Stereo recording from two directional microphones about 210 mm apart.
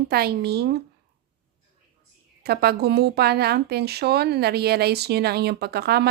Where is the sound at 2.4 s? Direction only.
50° right (ahead or behind).